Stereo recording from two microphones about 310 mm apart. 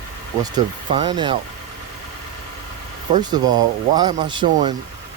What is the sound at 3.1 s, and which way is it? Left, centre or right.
Speech, centre.